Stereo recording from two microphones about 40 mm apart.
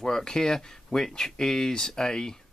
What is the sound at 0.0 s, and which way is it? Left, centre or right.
Speech, centre.